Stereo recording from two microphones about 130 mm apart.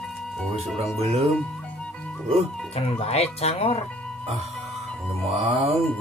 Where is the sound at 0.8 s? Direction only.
50° right (ahead or behind).